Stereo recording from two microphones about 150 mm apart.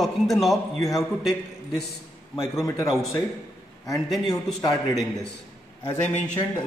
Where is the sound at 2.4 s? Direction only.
20° left (ahead or behind).